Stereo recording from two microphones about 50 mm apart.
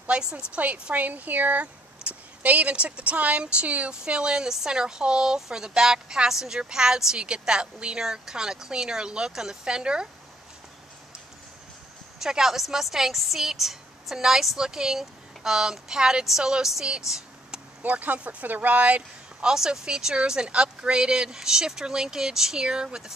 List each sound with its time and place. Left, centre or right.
0.2 s speech: centre
0.8 s speech: right
3.9 s speech: centre
12.2 s speech: centre
17.8 s speech: right
19.4 s speech: centre